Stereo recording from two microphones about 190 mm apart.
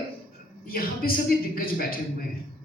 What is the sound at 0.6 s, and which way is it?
A man's voice, 50° left (ahead or behind).